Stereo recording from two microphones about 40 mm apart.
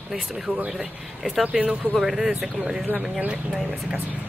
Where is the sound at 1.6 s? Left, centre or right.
Right.